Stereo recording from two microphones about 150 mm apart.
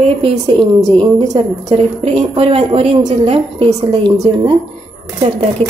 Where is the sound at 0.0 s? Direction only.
45° right (ahead or behind).